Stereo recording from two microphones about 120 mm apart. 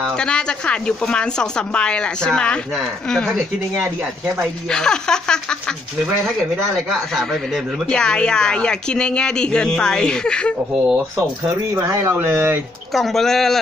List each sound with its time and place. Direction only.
0.2 s speech: 5° left (ahead or behind)
4.6 s speech: 5° left (ahead or behind)
6.7 s speech: centre (ahead or behind)
10.7 s speech: 5° right (ahead or behind)
11.4 s speech: 20° right (ahead or behind)
12.9 s speech: centre (ahead or behind)